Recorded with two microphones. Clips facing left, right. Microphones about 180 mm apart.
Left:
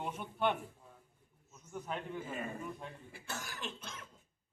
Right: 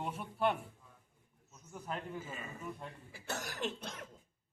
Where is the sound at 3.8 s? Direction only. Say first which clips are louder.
Right 4 dB; 35° right (ahead or behind).